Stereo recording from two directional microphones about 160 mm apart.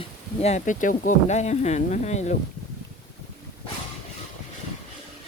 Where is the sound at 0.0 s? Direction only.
45° left (ahead or behind).